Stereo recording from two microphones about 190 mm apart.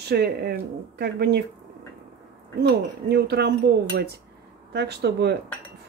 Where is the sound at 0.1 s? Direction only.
55° right (ahead or behind).